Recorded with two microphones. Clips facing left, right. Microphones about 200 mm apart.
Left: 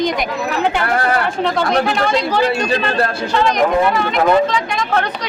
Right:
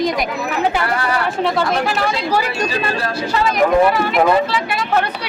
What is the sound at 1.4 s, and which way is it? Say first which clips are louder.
Speech: left 2 dB; 5° right (ahead or behind).